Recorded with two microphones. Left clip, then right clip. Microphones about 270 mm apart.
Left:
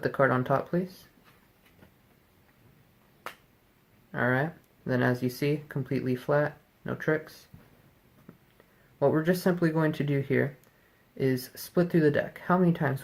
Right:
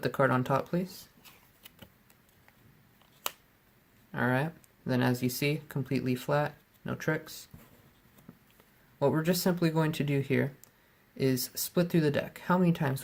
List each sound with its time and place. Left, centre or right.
0.0 s speech: right
4.1 s speech: right
8.3 s a sound: right
9.0 s speech: right